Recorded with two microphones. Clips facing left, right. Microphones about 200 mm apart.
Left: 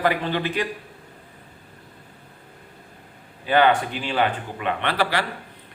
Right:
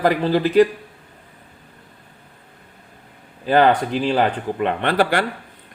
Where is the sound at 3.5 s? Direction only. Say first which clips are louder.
Right 3 dB; 40° right (ahead or behind).